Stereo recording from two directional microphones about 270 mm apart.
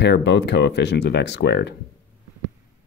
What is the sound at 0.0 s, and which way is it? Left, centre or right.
Speech, left.